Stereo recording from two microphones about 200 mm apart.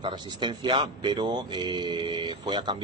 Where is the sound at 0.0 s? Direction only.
20° right (ahead or behind).